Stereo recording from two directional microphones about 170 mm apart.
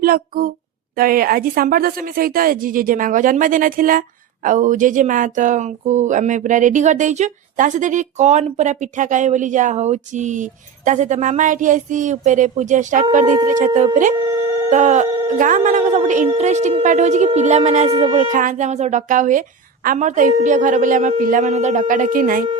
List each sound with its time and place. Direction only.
0.0 s a woman's voice: 55° right (ahead or behind); by 18.3 s 35° right (ahead or behind)
18.3 s speech: 45° right (ahead or behind)